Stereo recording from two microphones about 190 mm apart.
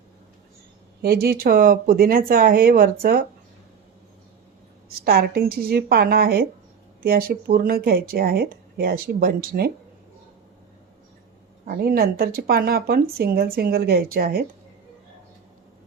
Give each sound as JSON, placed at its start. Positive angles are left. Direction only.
{"t": 1.0, "sound": "speech", "side_deg": -55}
{"t": 4.9, "sound": "speech", "side_deg": -50}
{"t": 11.6, "sound": "speech", "side_deg": -50}